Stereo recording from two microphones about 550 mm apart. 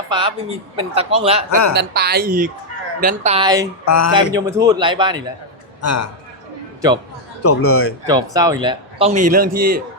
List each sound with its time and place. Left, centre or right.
0.1 s a man's voice: centre
1.5 s speech: left
1.7 s a man's voice: centre
3.8 s a man's voice: left
4.1 s a man's voice: centre
5.8 s a man's voice: left
7.4 s a man's voice: left
8.0 s a man's voice: centre